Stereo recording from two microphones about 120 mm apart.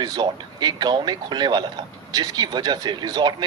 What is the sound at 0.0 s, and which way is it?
Speech, 35° right (ahead or behind).